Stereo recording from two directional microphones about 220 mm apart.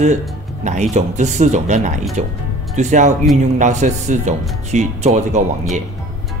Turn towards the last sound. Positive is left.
turn(degrees=-35)  # may be behind; listen again after turning